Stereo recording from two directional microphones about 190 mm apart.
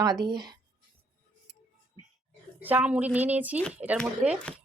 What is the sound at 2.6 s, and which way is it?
A woman's voice, 5° right (ahead or behind).